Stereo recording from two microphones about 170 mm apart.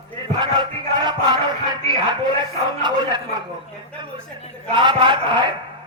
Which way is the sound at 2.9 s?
25° right (ahead or behind).